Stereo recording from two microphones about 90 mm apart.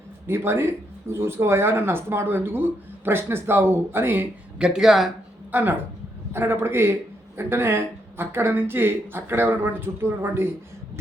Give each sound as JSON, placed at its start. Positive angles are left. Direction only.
{"t": 0.3, "sound": "speech", "side_deg": -30}
{"t": 4.5, "sound": "speech", "side_deg": -10}
{"t": 5.5, "sound": "speech", "side_deg": -20}